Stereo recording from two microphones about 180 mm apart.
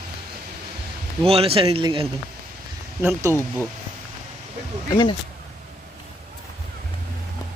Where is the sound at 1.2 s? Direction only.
35° right (ahead or behind).